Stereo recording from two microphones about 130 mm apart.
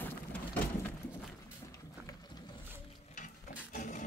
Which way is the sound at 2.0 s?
30° left (ahead or behind).